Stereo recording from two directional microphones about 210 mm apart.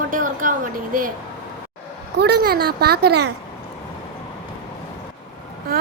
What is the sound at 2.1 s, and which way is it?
A child's voice, 50° right (ahead or behind).